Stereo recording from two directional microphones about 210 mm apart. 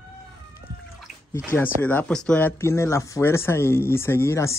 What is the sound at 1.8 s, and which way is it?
Speech, 10° left (ahead or behind).